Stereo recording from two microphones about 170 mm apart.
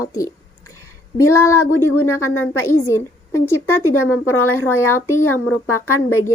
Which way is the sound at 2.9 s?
15° left (ahead or behind).